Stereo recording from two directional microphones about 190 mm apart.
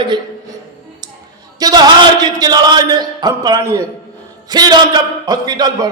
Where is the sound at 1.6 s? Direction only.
20° right (ahead or behind).